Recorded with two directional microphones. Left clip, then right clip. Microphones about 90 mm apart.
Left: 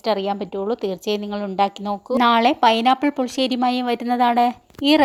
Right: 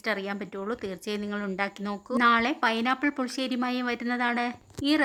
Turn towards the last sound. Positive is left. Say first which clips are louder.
# left 9 dB
turn(degrees=60)  # may be behind; listen again after turning